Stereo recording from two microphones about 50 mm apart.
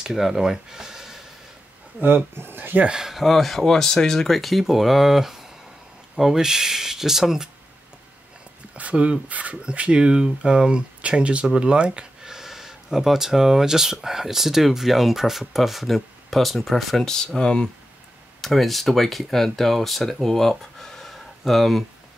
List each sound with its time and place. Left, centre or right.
0.0 s speech: centre
2.0 s speech: right
2.9 s speech: centre
4.4 s speech: centre
8.7 s speech: right; by 17.6 s centre
18.4 s speech: centre